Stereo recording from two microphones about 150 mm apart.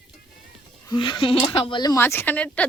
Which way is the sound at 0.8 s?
30° left (ahead or behind).